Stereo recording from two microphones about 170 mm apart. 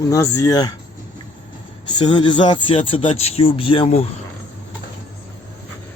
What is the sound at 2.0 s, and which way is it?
Speech, 25° left (ahead or behind).